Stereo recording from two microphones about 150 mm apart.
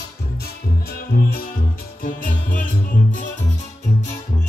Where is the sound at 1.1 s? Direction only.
75° left (ahead or behind).